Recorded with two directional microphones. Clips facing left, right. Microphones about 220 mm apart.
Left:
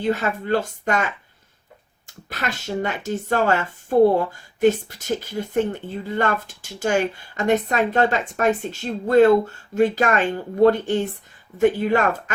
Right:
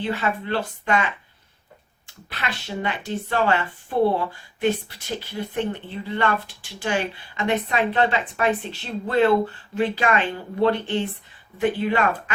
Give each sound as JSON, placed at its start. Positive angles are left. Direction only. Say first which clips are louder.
{"t": 0.0, "sound": "speech", "louder": "left 3 dB", "side_deg": 45}